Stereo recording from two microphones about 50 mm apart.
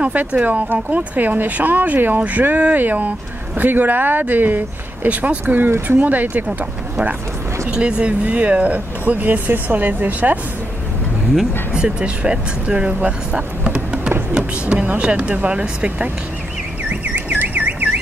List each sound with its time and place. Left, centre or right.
0.0 s speech: right
7.7 s speech: right
11.7 s speech: centre
17.1 s car alarm: right